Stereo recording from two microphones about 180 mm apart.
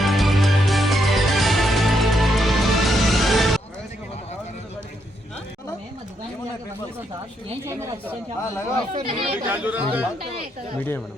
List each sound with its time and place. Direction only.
0.0 s music: centre (ahead or behind)
8.0 s speech: 15° left (ahead or behind)
8.9 s speech: 35° right (ahead or behind)
9.5 s speech: 10° right (ahead or behind)